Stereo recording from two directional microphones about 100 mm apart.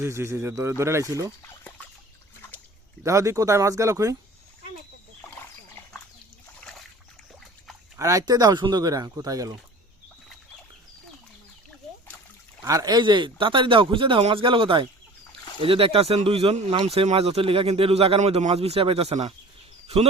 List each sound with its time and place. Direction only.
0.0 s speech: 30° right (ahead or behind)
3.0 s speech: 30° right (ahead or behind)
6.6 s splash: 5° left (ahead or behind)
7.9 s speech: 35° right (ahead or behind)
12.6 s speech: 35° right (ahead or behind); by 16.6 s 70° right (ahead or behind)
16.8 s speech: 85° right